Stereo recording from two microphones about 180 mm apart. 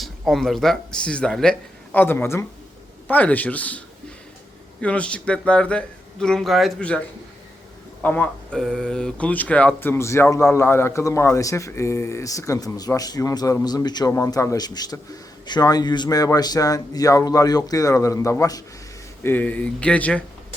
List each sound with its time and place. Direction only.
0.0 s a man's voice: centre (ahead or behind)
8.0 s speech: 10° left (ahead or behind)